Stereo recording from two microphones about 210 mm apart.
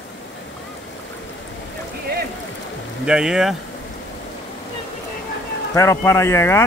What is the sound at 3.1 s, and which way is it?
Speech, 5° right (ahead or behind).